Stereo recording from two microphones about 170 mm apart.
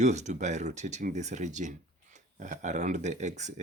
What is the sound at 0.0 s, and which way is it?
Speech, 40° right (ahead or behind).